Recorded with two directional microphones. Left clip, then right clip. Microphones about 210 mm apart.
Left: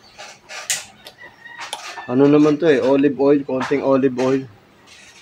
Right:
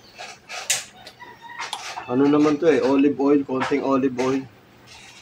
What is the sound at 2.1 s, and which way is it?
Speech, 30° left (ahead or behind).